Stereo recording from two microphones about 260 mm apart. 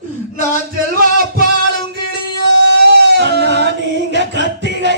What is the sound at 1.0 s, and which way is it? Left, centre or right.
Music, right.